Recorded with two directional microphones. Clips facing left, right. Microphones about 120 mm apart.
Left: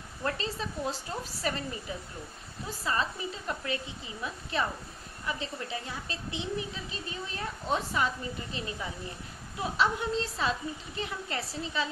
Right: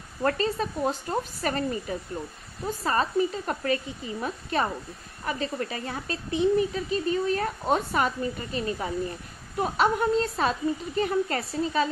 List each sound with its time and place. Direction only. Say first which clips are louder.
0.2 s a woman's voice: right 8 dB; 50° right (ahead or behind)